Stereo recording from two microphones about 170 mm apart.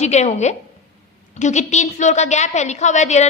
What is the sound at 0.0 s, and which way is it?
A woman's voice, 40° left (ahead or behind).